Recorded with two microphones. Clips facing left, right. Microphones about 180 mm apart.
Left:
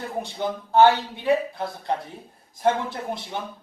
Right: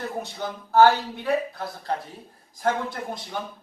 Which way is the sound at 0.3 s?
20° left (ahead or behind).